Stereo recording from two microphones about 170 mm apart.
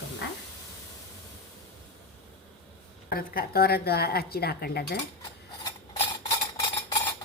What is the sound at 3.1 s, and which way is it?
A woman's voice, 60° left (ahead or behind).